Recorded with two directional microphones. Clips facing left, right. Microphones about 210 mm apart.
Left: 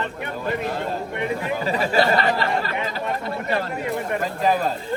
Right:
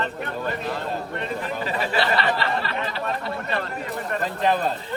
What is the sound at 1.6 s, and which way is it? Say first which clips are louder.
Speech: left 5 dB; 40° left (ahead or behind).